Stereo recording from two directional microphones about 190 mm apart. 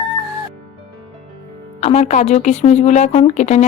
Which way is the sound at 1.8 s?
35° left (ahead or behind).